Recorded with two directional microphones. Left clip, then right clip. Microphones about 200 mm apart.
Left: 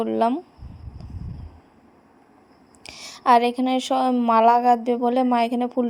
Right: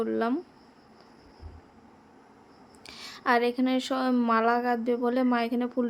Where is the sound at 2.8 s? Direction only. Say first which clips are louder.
Left 8 dB; 20° left (ahead or behind).